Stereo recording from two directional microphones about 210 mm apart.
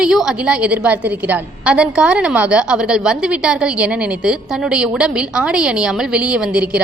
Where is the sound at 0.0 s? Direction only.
5° right (ahead or behind).